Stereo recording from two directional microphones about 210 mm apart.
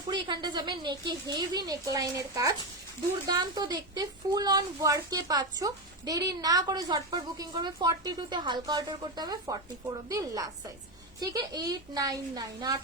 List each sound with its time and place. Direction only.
0.1 s a woman's voice: 20° right (ahead or behind)